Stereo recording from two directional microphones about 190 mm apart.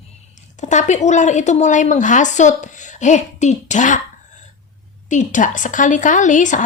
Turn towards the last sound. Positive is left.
turn(degrees=40)  # may be behind; listen again after turning